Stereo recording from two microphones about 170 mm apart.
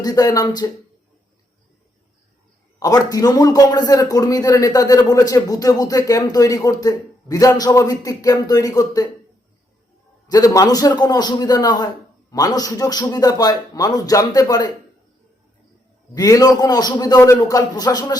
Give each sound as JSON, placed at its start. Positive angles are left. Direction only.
{"t": 0.0, "sound": "a man's voice", "side_deg": 20}
{"t": 2.7, "sound": "a man's voice", "side_deg": 20}
{"t": 10.2, "sound": "a man's voice", "side_deg": 20}
{"t": 16.1, "sound": "a man's voice", "side_deg": 20}